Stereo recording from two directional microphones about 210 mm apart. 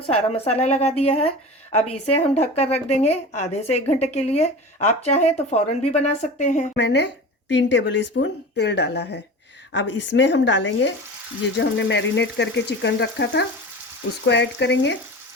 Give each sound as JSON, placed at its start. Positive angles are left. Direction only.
{"t": 0.0, "sound": "a woman's voice", "side_deg": 30}
{"t": 6.7, "sound": "speech", "side_deg": 55}